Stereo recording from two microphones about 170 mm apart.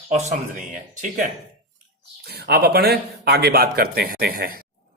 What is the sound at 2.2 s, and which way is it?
Speech, 70° right (ahead or behind).